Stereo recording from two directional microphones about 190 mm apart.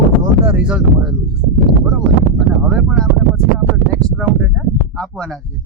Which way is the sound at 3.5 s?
Centre (ahead or behind).